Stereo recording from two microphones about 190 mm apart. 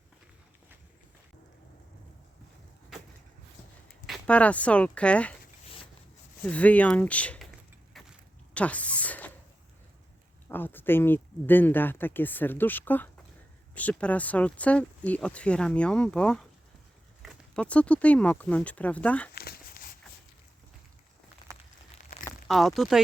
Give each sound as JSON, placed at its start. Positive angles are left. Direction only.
{"t": 4.0, "sound": "speech", "side_deg": 5}
{"t": 6.4, "sound": "speech", "side_deg": 5}
{"t": 7.9, "sound": "a sound", "side_deg": 0}
{"t": 8.5, "sound": "speech", "side_deg": 5}
{"t": 10.5, "sound": "speech", "side_deg": 10}
{"t": 19.3, "sound": "crumpling", "side_deg": 55}
{"t": 21.4, "sound": "a sound", "side_deg": 20}
{"t": 22.4, "sound": "speech", "side_deg": 0}